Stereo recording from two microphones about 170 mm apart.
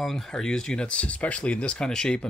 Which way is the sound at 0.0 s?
5° left (ahead or behind).